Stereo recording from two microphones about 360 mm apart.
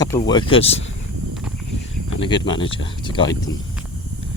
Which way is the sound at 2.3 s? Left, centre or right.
Centre.